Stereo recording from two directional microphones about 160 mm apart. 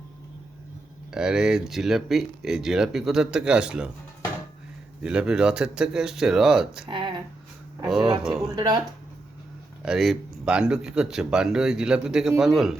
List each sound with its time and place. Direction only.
1.1 s speech: 5° right (ahead or behind)
5.0 s speech: 5° right (ahead or behind)
6.8 s speech: 30° right (ahead or behind)
8.2 s speech: centre (ahead or behind)
8.4 s speech: 25° right (ahead or behind)
9.8 s speech: centre (ahead or behind)